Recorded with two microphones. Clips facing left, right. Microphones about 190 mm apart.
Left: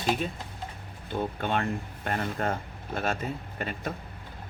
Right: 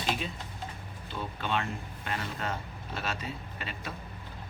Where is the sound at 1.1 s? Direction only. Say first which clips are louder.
Left 4 dB; 50° left (ahead or behind).